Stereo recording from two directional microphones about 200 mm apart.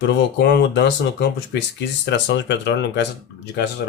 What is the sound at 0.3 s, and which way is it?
Speech, 55° left (ahead or behind).